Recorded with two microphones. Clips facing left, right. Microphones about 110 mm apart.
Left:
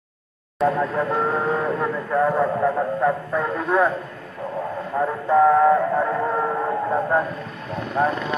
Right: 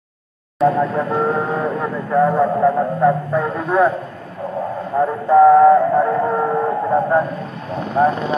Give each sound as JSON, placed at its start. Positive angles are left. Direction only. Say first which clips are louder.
{"t": 0.7, "sound": "speech", "louder": "right 4 dB", "side_deg": -10}
{"t": 4.9, "sound": "speech", "louder": "right 5 dB", "side_deg": -10}
{"t": 5.3, "sound": "music", "louder": "right 6 dB", "side_deg": -10}
{"t": 7.9, "sound": "speech", "louder": "right 6 dB", "side_deg": -25}